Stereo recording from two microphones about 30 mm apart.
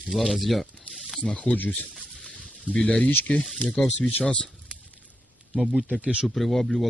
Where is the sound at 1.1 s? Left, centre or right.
Left.